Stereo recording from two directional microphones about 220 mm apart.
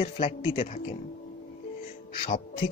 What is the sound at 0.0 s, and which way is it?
Speech, 25° left (ahead or behind).